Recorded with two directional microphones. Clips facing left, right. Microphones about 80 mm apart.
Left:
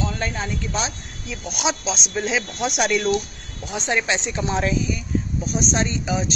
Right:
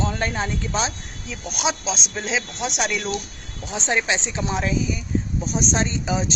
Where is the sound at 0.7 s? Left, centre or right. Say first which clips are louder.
Right 1 dB; right.